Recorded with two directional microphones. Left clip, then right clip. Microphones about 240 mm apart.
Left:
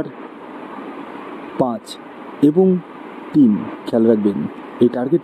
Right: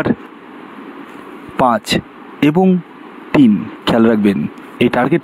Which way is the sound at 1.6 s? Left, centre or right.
Right.